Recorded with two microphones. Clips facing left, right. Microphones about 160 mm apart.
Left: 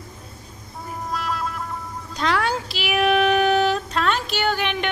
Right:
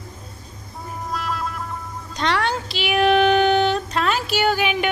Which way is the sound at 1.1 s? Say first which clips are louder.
Even; centre (ahead or behind).